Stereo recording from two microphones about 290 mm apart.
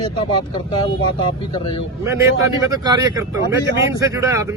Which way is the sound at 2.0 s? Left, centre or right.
Centre.